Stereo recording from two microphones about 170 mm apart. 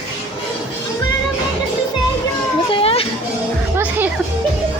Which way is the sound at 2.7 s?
35° left (ahead or behind).